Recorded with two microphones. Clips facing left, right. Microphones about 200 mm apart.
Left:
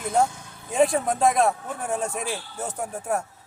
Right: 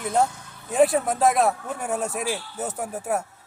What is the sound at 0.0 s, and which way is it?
Speech, 5° right (ahead or behind).